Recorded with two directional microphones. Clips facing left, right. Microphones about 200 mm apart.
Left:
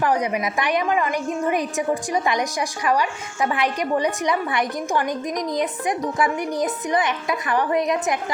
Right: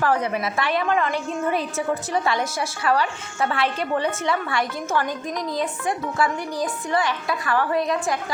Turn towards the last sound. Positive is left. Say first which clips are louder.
# left 1 dB
turn(degrees=20)  # may be behind; listen again after turning